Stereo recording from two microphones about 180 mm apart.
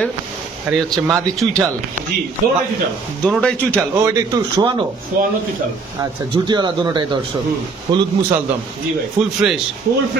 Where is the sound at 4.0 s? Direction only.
20° right (ahead or behind).